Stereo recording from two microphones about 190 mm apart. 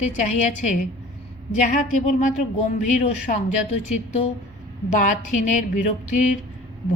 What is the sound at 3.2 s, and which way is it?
A woman's voice, 35° left (ahead or behind).